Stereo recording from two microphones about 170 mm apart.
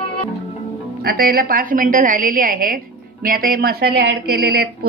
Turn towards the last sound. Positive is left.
turn(degrees=-65)  # may be behind; listen again after turning